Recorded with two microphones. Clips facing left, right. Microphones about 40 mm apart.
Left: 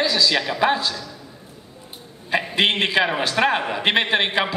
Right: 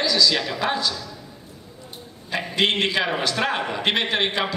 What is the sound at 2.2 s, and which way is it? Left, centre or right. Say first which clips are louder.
A man's voice: left 2 dB; centre.